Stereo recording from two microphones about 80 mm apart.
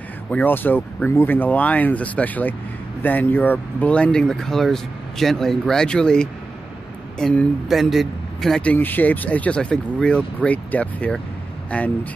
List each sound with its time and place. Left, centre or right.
0.3 s speech: left; by 8.6 s centre
8.6 s speech: left